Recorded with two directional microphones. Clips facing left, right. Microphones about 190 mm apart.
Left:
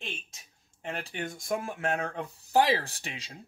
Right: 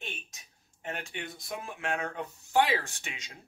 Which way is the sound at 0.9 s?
35° left (ahead or behind).